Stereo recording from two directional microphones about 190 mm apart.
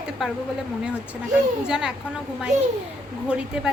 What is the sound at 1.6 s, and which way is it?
Speech, 5° right (ahead or behind).